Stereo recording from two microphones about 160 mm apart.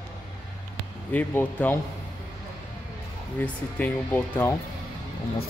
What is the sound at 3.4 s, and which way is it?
Speech, 10° left (ahead or behind).